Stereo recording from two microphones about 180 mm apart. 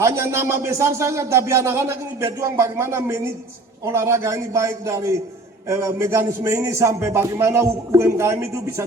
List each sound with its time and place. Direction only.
0.0 s speech: 15° right (ahead or behind)